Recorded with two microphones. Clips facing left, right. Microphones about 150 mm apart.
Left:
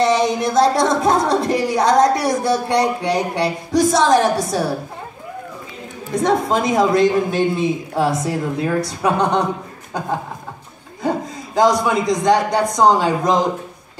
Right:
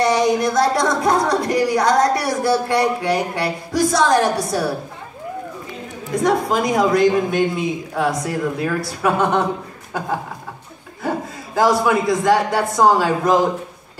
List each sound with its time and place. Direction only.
0.0 s speech: 20° left (ahead or behind)
6.2 s speech: 25° left (ahead or behind)
8.6 s speech: 20° left (ahead or behind)
11.0 s a man's voice: 15° left (ahead or behind)